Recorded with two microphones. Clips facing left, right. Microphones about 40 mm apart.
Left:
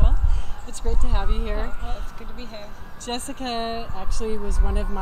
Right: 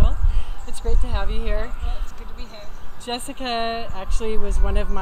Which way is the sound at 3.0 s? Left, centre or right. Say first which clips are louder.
Right 2 dB; right.